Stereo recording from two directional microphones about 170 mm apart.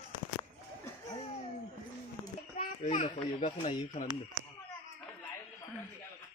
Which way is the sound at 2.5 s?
45° left (ahead or behind).